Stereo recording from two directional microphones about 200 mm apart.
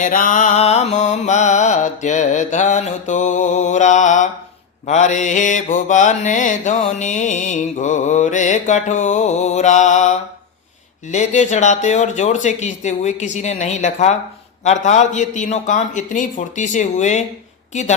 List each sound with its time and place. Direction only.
0.0 s mantra: 40° left (ahead or behind)